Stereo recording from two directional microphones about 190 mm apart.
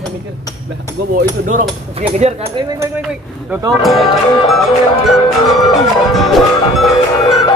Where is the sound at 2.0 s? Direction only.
35° right (ahead or behind).